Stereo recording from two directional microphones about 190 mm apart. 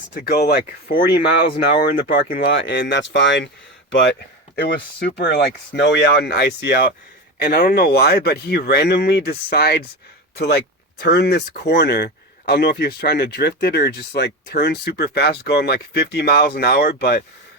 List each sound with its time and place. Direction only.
0.1 s speech: 55° left (ahead or behind)